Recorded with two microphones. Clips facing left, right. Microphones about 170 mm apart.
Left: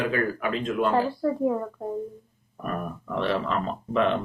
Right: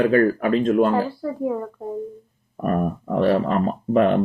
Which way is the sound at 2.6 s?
45° right (ahead or behind).